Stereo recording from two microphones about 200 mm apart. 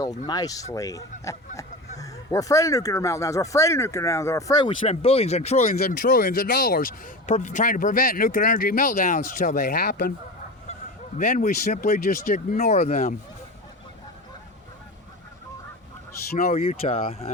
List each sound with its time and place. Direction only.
0.3 s speech: 20° left (ahead or behind)
4.9 s speech: 30° left (ahead or behind); by 10.1 s 50° left (ahead or behind)
11.3 s speech: 40° left (ahead or behind)
16.5 s speech: 30° left (ahead or behind)